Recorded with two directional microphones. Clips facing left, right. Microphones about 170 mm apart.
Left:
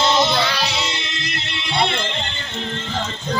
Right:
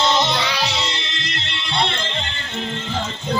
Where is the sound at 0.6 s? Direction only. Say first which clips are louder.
Even; 10° left (ahead or behind).